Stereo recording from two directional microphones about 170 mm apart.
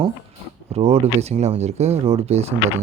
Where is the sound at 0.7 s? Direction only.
40° right (ahead or behind).